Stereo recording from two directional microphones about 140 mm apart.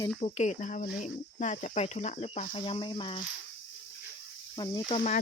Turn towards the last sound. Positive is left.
turn(degrees=65)  # may be behind; listen again after turning